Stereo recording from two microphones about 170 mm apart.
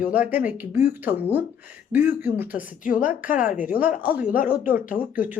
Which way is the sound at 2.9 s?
50° left (ahead or behind).